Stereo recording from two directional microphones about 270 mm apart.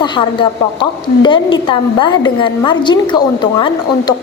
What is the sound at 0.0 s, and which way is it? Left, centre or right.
A woman's voice, centre.